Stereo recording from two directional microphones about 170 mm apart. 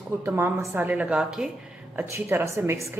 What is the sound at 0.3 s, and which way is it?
A woman's voice, 15° right (ahead or behind).